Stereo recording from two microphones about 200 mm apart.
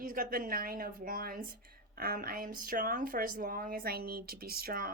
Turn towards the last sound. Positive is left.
turn(degrees=-45)  # may be behind; listen again after turning